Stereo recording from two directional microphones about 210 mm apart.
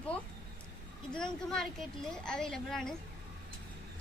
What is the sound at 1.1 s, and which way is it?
A woman's voice, 5° left (ahead or behind).